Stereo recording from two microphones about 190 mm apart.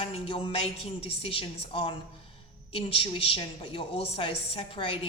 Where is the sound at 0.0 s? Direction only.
30° left (ahead or behind).